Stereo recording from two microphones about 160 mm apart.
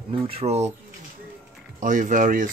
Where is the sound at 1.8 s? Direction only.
55° right (ahead or behind).